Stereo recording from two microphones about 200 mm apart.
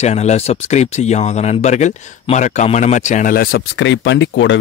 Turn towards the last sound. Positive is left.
turn(degrees=65)  # may be behind; listen again after turning